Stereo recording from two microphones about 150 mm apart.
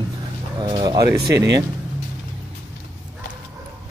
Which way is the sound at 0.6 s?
30° right (ahead or behind).